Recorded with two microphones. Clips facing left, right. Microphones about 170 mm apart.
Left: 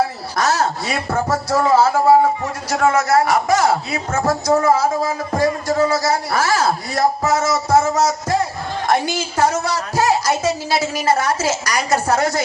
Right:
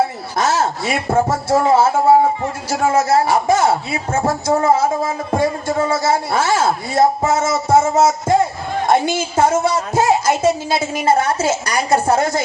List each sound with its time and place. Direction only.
0.3 s a man's voice: 25° right (ahead or behind)